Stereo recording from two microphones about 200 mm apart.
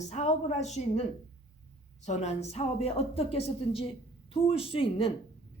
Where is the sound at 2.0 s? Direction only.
35° left (ahead or behind).